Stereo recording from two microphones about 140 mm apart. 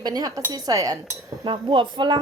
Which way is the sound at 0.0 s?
30° right (ahead or behind).